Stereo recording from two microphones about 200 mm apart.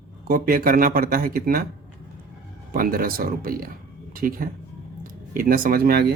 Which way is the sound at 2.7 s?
45° right (ahead or behind).